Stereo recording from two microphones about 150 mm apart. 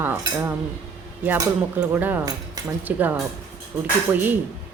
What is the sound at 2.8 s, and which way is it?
Speech, 10° right (ahead or behind).